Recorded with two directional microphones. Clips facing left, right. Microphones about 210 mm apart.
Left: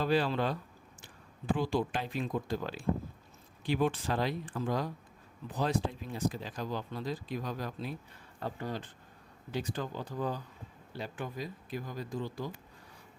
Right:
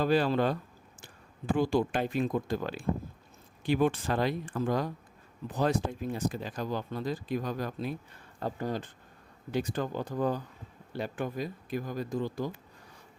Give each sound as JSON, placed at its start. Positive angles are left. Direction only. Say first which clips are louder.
{"t": 0.0, "sound": "speech", "louder": "right 4 dB", "side_deg": -45}
{"t": 1.5, "sound": "speech", "louder": "right 6 dB", "side_deg": -45}